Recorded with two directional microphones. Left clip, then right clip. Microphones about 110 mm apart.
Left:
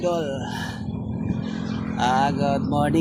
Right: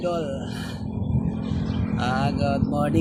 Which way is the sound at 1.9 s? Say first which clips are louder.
Left 6 dB; 50° right (ahead or behind).